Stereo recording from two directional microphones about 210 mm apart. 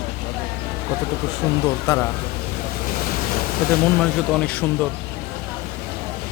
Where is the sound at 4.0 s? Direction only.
5° left (ahead or behind).